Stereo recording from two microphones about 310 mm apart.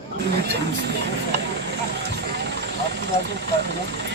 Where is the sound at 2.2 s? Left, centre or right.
Right.